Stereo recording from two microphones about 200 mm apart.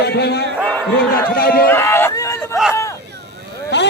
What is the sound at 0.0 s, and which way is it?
A man's voice, 55° left (ahead or behind).